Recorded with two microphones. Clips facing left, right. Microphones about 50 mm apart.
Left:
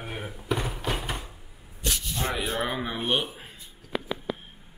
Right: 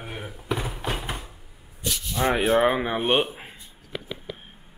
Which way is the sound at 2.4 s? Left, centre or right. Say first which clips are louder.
Right 12 dB; right.